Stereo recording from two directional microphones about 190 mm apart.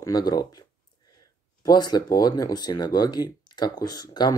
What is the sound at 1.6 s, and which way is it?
Speech, 20° left (ahead or behind).